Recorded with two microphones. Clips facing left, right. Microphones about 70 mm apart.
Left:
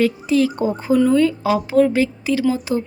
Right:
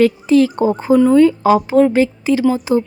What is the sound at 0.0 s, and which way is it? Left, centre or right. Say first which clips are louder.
A woman's voice: right 5 dB; right.